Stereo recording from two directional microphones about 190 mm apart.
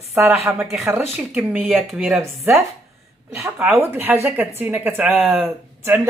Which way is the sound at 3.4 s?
10° right (ahead or behind).